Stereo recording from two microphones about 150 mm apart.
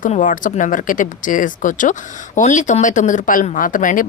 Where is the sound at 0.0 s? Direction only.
60° left (ahead or behind).